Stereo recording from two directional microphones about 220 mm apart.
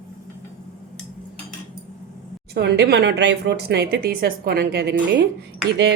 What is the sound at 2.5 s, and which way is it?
Speech, 50° right (ahead or behind).